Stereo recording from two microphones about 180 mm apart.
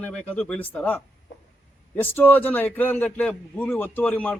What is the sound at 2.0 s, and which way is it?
A man's voice, 10° left (ahead or behind).